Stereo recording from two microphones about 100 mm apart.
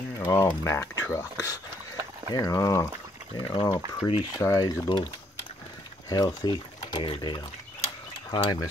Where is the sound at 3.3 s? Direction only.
45° left (ahead or behind).